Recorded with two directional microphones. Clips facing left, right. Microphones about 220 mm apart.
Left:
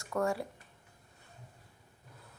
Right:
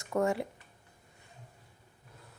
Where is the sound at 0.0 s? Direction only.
20° right (ahead or behind).